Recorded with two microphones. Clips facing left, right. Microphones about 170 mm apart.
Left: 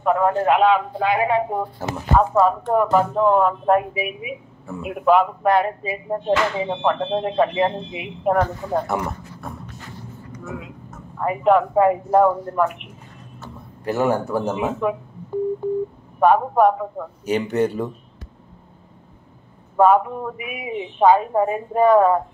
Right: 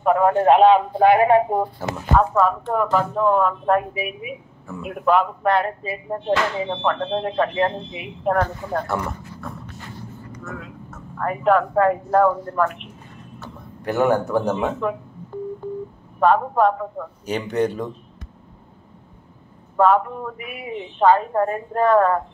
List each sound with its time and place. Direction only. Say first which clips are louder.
0.4 s speech: right 3 dB; 30° right (ahead or behind)
1.0 s speech: right 6 dB; 55° right (ahead or behind)
1.8 s speech: left 4 dB; 5° left (ahead or behind)
10.4 s speech: left 2 dB; 15° left (ahead or behind)
13.8 s speech: right 1 dB; 5° left (ahead or behind)
16.2 s speech: left 2 dB; 15° left (ahead or behind)
19.8 s speech: left 2 dB; 10° left (ahead or behind)